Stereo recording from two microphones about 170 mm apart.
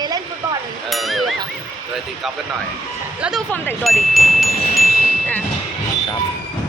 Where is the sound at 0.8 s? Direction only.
Centre (ahead or behind).